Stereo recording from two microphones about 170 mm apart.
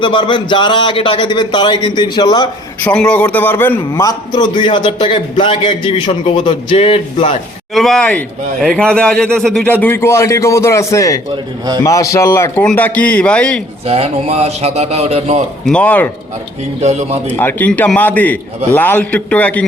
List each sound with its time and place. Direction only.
0.0 s a man's voice: 30° left (ahead or behind)
2.8 s a man's voice: 5° left (ahead or behind); by 7.3 s 30° left (ahead or behind)
7.7 s a man's voice: centre (ahead or behind)
9.8 s a man's voice: 15° left (ahead or behind)
13.8 s a man's voice: 35° right (ahead or behind)
15.6 s a man's voice: 5° left (ahead or behind)
16.8 s a man's voice: 40° right (ahead or behind)
17.3 s a man's voice: 10° left (ahead or behind)